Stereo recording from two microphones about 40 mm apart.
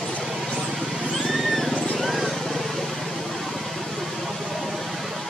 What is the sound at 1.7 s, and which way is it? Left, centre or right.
Vehicle, left.